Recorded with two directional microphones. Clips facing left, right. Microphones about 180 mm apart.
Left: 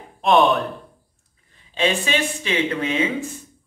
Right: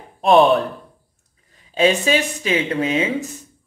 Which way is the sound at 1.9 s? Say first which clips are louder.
Right 4 dB; 40° right (ahead or behind).